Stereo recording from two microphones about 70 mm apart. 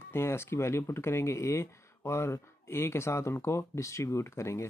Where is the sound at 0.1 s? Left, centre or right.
Left.